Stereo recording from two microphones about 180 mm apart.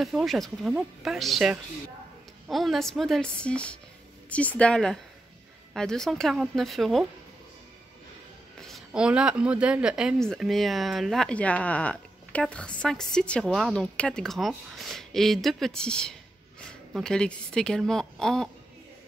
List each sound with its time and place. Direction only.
0.0 s speech: centre (ahead or behind)
8.5 s speech: centre (ahead or behind)